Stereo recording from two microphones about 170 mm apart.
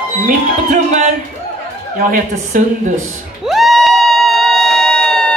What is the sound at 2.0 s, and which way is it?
Speech, 55° right (ahead or behind).